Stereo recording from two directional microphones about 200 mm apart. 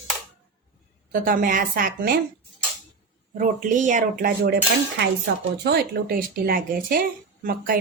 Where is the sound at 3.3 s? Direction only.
40° right (ahead or behind).